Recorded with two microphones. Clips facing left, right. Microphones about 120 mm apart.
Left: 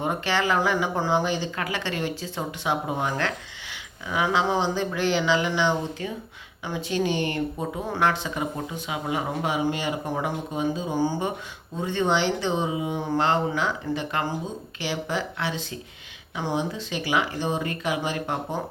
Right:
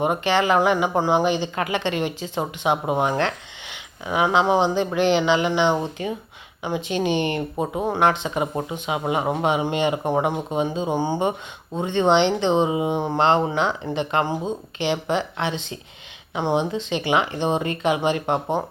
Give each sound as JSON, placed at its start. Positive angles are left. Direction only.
{"t": 0.0, "sound": "speech", "side_deg": -15}